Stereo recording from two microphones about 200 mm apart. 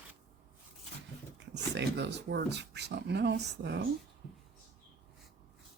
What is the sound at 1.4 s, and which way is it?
Speech, 60° right (ahead or behind).